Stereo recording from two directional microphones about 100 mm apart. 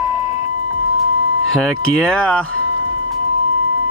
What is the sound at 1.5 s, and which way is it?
Speech, 5° left (ahead or behind).